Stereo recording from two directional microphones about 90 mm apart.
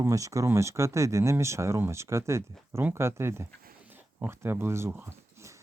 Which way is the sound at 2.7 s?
25° right (ahead or behind).